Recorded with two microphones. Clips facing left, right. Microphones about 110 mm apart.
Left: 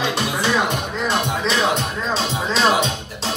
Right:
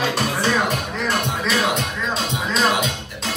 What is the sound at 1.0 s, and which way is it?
Music, 25° left (ahead or behind).